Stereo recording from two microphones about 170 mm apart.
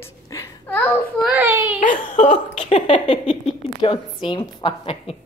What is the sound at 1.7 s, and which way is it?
Speech, 50° left (ahead or behind).